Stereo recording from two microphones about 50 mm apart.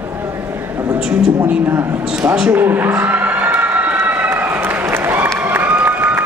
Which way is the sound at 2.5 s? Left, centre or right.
Right.